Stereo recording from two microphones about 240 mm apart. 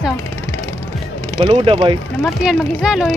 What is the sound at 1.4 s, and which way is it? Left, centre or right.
Speech, right.